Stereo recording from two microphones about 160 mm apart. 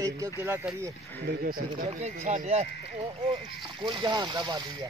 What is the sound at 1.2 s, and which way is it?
Speech, 65° right (ahead or behind).